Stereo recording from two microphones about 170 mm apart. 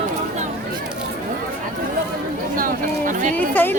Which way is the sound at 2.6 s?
50° right (ahead or behind).